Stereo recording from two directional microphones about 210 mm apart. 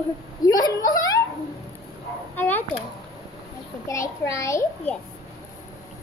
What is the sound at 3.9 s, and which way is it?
A child's voice, 15° left (ahead or behind).